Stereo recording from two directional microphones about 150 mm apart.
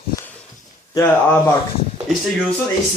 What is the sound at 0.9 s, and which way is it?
Speech, 15° left (ahead or behind).